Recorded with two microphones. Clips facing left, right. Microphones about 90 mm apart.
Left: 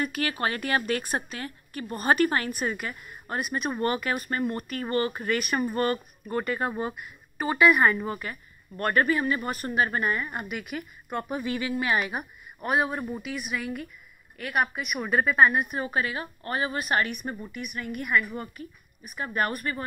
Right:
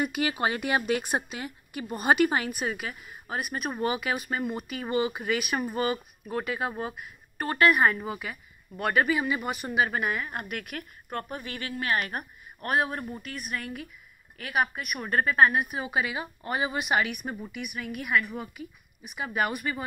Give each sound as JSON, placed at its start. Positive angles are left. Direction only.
{"t": 0.0, "sound": "speech", "side_deg": -15}
{"t": 11.2, "sound": "speech", "side_deg": 20}
{"t": 12.1, "sound": "speech", "side_deg": 5}
{"t": 17.2, "sound": "speech", "side_deg": -5}
{"t": 17.5, "sound": "speech", "side_deg": -65}
{"t": 18.0, "sound": "speech", "side_deg": 0}